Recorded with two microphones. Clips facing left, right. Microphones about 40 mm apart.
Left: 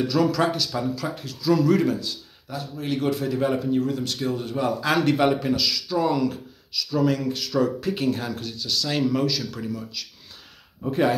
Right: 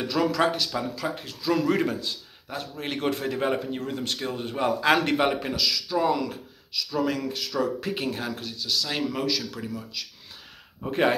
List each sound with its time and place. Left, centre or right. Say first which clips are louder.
0.0 s speech: left 2 dB; right
2.6 s speech: left 3 dB; right
5.5 s speech: left 2 dB; centre
10.9 s speech: left 1 dB; right